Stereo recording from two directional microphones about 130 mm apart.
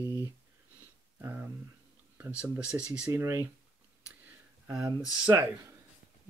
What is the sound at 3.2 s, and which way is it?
Speech, 25° right (ahead or behind).